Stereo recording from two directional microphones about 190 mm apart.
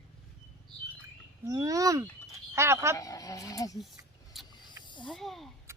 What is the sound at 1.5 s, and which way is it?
Speech, 15° right (ahead or behind).